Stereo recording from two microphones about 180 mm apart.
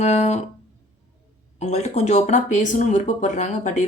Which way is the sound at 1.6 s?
40° left (ahead or behind).